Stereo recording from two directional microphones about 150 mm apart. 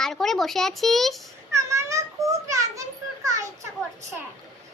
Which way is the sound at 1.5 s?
20° right (ahead or behind).